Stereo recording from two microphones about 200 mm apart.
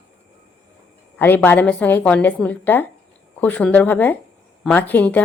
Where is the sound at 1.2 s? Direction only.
10° left (ahead or behind).